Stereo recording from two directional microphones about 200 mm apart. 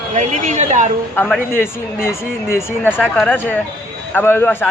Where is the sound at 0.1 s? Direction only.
35° right (ahead or behind).